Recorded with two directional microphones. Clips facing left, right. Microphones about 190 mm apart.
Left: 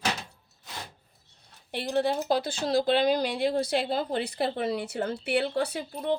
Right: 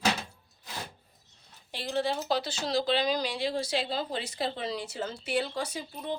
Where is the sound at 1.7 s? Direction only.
55° left (ahead or behind).